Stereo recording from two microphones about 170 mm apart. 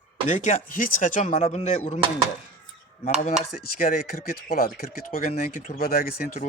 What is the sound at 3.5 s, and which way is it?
Speech, 60° left (ahead or behind).